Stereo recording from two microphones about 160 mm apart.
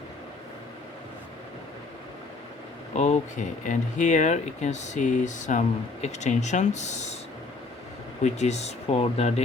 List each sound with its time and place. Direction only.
2.9 s speech: 45° left (ahead or behind)
8.2 s speech: 45° left (ahead or behind)